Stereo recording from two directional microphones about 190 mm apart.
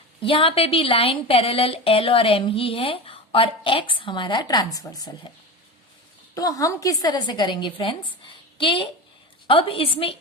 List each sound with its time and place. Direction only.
0.2 s a woman's voice: 30° left (ahead or behind)
6.3 s a woman's voice: 20° left (ahead or behind)